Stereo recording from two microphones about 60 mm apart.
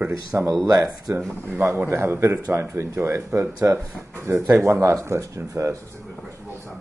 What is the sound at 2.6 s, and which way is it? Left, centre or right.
A man's voice, right.